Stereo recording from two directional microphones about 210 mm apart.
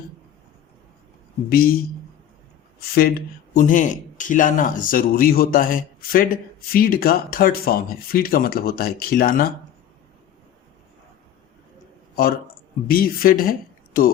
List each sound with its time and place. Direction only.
1.5 s speech: 45° left (ahead or behind)
2.9 s speech: 45° left (ahead or behind)
12.9 s a woman's voice: 45° left (ahead or behind)